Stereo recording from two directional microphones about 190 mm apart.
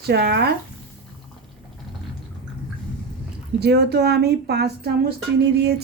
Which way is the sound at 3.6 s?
60° right (ahead or behind).